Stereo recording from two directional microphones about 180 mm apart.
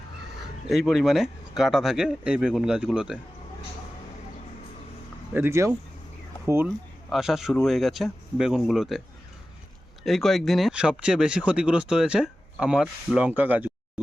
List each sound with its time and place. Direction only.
0.7 s speech: centre (ahead or behind)
5.3 s speech: 15° right (ahead or behind)
7.1 s speech: centre (ahead or behind)
10.1 s speech: centre (ahead or behind)